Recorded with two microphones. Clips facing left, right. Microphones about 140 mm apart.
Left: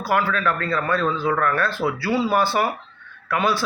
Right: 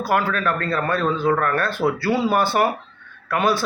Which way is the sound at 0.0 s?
50° right (ahead or behind).